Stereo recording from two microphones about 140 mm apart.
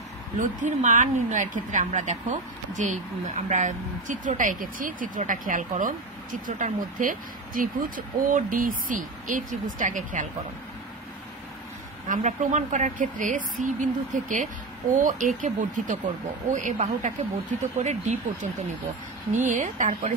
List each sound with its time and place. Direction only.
0.4 s a woman's voice: 60° right (ahead or behind)
12.1 s a woman's voice: 60° right (ahead or behind)